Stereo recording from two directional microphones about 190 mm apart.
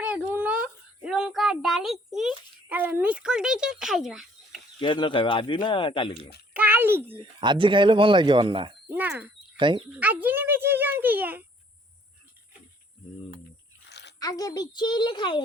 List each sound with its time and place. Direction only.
0.0 s a sound: 5° right (ahead or behind)
2.6 s speech: 10° right (ahead or behind)
4.8 s a child's voice: 25° left (ahead or behind)
6.5 s a child's voice: 10° right (ahead or behind)
7.2 s speech: 25° right (ahead or behind)
8.9 s a child's voice: 10° right (ahead or behind)
9.6 s speech: 25° right (ahead or behind)
10.0 s a child's voice: 10° right (ahead or behind)
14.2 s a child's voice: 20° left (ahead or behind)